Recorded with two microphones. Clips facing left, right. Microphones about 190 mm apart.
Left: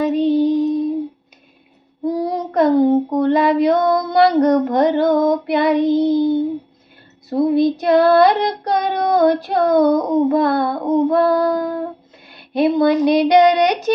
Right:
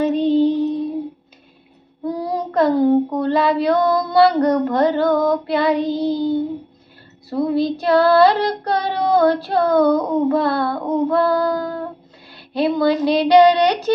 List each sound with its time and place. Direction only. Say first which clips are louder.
0.0 s music: even; 10° left (ahead or behind)
2.0 s child singing: left 3 dB; 20° left (ahead or behind)